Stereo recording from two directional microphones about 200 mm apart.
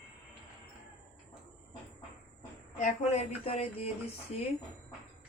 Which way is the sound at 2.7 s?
35° left (ahead or behind).